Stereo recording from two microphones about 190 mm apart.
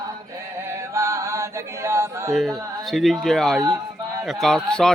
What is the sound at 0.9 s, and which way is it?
Yodeling, 15° right (ahead or behind).